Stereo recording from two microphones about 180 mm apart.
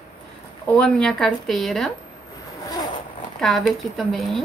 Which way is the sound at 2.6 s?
20° left (ahead or behind).